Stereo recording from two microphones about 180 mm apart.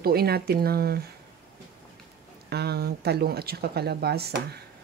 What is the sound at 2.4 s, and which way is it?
Speech, 65° right (ahead or behind).